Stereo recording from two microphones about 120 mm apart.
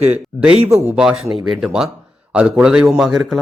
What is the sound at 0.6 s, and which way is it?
Speech, 20° right (ahead or behind).